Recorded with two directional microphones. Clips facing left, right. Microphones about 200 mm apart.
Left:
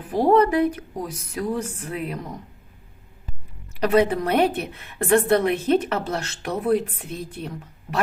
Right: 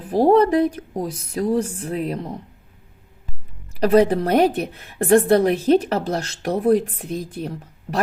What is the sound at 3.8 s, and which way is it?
A woman's voice, 35° right (ahead or behind).